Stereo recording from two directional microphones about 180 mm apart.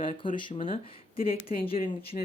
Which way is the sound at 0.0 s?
30° left (ahead or behind).